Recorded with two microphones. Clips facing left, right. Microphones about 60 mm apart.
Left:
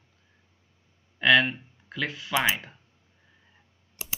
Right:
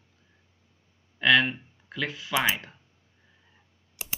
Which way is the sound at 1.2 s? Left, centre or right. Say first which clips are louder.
Left 1 dB; centre.